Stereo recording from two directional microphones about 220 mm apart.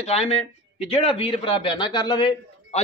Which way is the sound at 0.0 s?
30° left (ahead or behind).